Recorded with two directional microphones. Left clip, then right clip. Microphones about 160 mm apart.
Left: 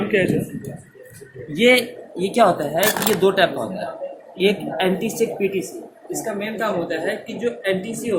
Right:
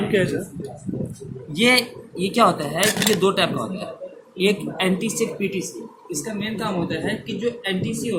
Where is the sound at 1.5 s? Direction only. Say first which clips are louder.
Left 2 dB; 20° right (ahead or behind).